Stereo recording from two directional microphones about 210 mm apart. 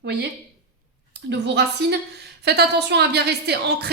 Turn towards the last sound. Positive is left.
turn(degrees=-50)  # may be behind; listen again after turning